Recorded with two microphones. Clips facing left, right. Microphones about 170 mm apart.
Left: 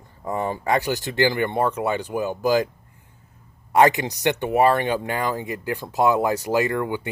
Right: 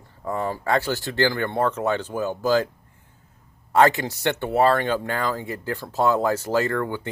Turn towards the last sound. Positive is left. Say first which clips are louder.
# left 1 dB
turn(degrees=15)  # may be behind; listen again after turning